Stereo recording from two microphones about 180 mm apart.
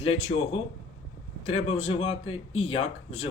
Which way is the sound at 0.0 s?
35° left (ahead or behind).